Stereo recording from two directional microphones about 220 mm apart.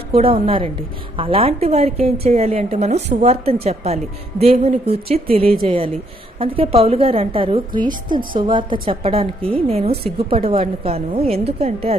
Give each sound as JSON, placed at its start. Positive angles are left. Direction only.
{"t": 0.1, "sound": "a woman's voice", "side_deg": -25}